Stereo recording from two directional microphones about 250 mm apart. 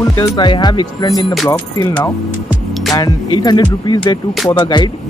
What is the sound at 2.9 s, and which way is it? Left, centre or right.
Speech, centre.